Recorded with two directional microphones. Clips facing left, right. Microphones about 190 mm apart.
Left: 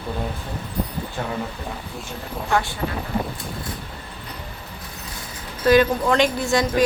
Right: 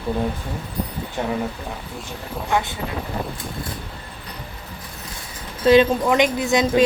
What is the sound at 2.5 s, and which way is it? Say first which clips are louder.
Speech: even; 20° right (ahead or behind).